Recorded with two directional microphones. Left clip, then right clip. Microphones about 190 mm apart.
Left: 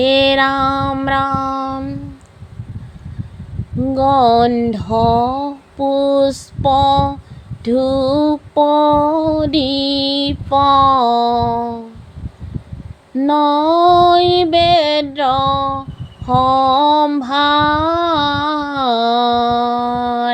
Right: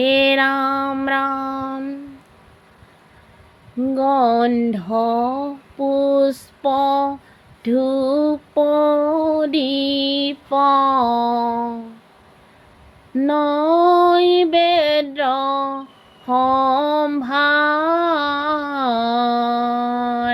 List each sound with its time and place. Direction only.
0.0 s female singing: 30° left (ahead or behind)
3.9 s female singing: 30° left (ahead or behind)
13.1 s female singing: 30° left (ahead or behind)